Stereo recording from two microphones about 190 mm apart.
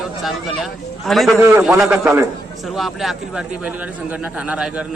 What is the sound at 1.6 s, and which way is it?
Speech, 10° right (ahead or behind).